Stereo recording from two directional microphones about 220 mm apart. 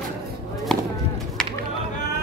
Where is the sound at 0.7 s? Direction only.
Centre (ahead or behind).